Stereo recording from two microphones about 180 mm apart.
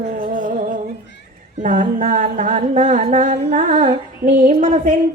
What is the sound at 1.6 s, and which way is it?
Humming, 45° right (ahead or behind).